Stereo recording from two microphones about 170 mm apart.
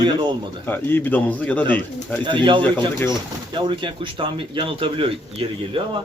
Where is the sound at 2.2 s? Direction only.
25° right (ahead or behind).